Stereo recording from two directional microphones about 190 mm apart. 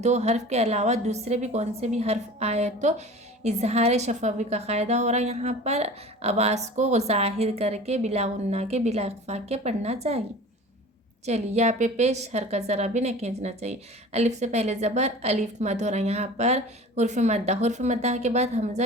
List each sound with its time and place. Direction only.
0.0 s a woman's voice: 35° right (ahead or behind)
11.3 s a woman's voice: 35° right (ahead or behind)